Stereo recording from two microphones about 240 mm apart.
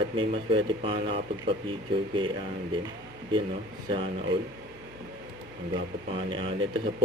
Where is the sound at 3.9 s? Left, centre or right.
Right.